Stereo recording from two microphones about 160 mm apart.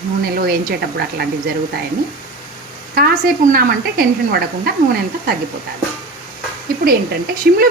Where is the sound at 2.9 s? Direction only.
65° right (ahead or behind).